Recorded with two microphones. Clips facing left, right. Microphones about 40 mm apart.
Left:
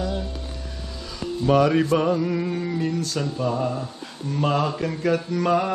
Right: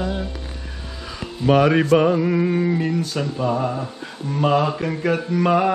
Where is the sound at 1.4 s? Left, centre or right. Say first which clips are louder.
Right 3 dB; right.